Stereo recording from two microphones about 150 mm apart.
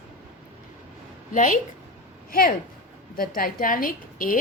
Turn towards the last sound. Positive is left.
turn(degrees=65)  # may be behind; listen again after turning